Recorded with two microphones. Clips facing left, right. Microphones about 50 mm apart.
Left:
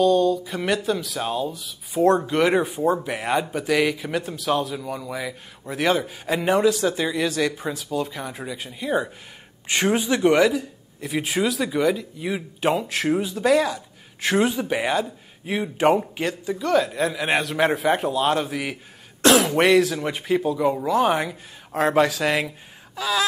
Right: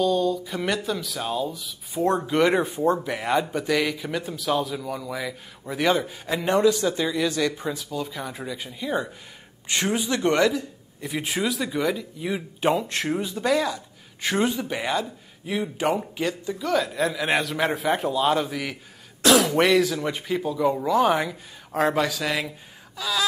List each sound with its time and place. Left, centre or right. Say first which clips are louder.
0.0 s speech: left 4 dB; centre
1.2 s a man's voice: even; centre
1.5 s a man's voice: left 2 dB; centre
19.2 s throat clearing: left 2 dB; centre
20.0 s a man's voice: left 3 dB; centre
21.9 s a man's voice: left 5 dB; centre